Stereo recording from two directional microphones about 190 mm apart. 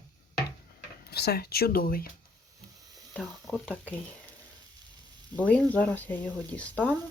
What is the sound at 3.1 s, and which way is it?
Speech, centre (ahead or behind).